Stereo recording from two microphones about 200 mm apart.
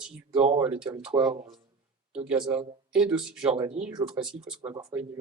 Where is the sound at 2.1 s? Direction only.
5° right (ahead or behind).